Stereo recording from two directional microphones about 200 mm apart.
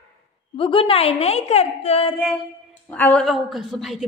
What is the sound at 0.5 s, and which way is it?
A woman's voice, 25° left (ahead or behind).